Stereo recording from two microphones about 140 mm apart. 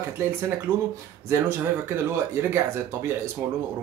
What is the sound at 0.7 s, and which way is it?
Speech, 15° right (ahead or behind).